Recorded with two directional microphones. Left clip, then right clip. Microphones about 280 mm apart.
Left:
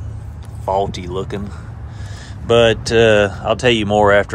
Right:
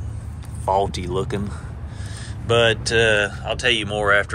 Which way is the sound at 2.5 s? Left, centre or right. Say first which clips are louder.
Left 5 dB; left.